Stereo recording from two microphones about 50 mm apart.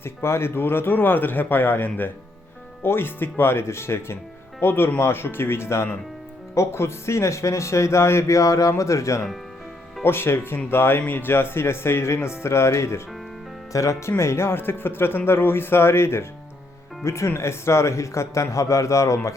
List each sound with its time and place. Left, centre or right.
0.0 s speech: left
4.6 s speech: left
6.5 s speech: left
8.8 s speech: left
10.0 s speech: left
11.0 s speech: left
11.3 s speech: left
13.7 s speech: left
14.2 s speech: left
17.0 s speech: left